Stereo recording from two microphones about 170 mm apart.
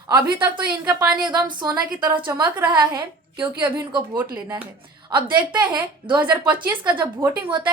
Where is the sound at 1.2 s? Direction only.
25° right (ahead or behind).